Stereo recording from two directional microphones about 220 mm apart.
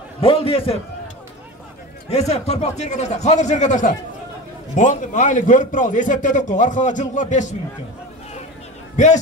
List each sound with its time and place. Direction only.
0.2 s a man's voice: 25° left (ahead or behind)
2.0 s a man's voice: 30° left (ahead or behind)
8.9 s a man's voice: 35° left (ahead or behind)